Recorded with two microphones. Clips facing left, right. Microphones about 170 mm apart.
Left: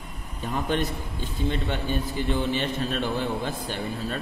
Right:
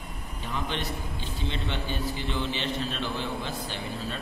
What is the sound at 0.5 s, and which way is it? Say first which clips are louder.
A man's voice: left 6 dB; 50° left (ahead or behind).